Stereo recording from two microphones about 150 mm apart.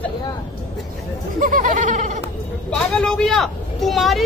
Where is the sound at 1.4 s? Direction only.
60° right (ahead or behind).